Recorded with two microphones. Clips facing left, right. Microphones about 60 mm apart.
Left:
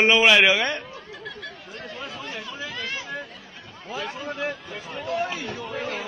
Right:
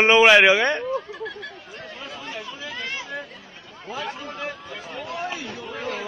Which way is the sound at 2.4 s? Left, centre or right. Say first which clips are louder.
Even; centre.